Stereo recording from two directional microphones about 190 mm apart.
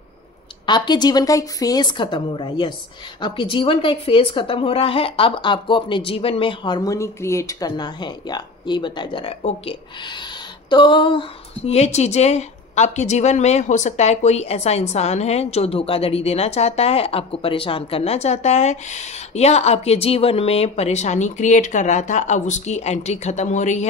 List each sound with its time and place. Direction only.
0.7 s a woman's voice: 25° left (ahead or behind); by 23.9 s 40° left (ahead or behind)